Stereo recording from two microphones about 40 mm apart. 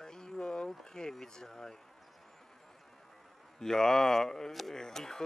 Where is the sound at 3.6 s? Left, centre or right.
Centre.